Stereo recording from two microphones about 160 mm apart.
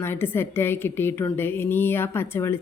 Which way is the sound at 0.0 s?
15° left (ahead or behind).